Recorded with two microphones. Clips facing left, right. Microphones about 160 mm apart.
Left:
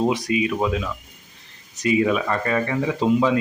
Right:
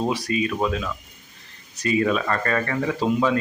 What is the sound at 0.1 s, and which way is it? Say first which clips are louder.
Speech: left 2 dB; 20° left (ahead or behind).